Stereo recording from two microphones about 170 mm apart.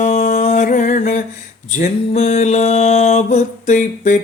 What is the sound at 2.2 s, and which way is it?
Music, 40° left (ahead or behind).